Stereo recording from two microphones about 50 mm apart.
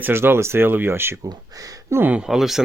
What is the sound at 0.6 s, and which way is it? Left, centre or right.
Speech, right.